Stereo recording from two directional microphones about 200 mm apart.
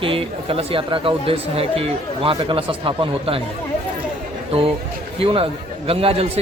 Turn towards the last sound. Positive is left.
turn(degrees=-30)  # may be behind; listen again after turning